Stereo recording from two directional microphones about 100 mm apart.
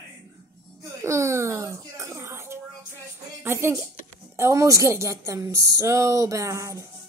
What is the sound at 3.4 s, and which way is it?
A woman's voice, 25° right (ahead or behind).